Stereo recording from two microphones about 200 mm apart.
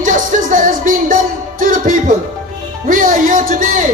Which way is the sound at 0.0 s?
40° right (ahead or behind).